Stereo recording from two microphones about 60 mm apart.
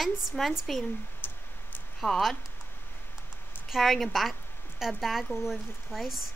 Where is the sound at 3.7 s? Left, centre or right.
Centre.